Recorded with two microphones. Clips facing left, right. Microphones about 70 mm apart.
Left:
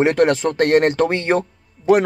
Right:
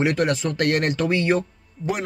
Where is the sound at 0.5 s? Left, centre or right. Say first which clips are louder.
Left 8 dB; left.